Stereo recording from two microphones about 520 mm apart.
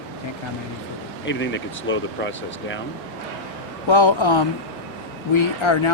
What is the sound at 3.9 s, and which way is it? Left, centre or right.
Speech, left.